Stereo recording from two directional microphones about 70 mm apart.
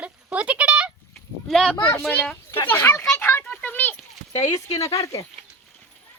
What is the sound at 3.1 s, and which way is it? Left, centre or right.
Children playing, left.